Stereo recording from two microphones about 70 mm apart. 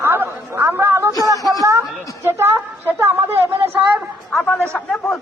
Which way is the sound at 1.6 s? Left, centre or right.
Right.